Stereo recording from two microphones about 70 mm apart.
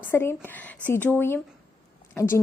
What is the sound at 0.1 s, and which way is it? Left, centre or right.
A woman's voice, left.